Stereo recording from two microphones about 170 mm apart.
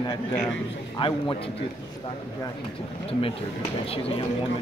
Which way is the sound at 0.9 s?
25° left (ahead or behind).